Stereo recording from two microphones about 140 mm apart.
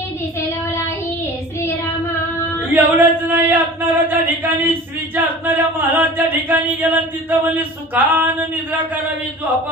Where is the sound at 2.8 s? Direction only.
15° right (ahead or behind).